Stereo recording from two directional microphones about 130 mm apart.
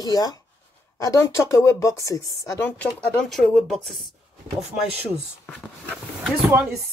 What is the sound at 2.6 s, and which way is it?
Speech, 10° left (ahead or behind).